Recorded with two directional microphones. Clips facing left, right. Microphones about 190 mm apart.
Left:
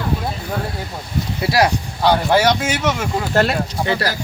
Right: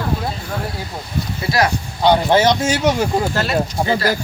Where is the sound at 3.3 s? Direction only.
65° left (ahead or behind).